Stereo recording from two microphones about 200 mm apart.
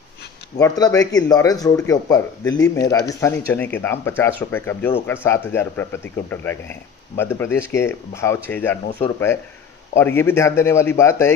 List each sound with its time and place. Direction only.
0.6 s speech: 20° left (ahead or behind)
9.9 s speech: 10° left (ahead or behind)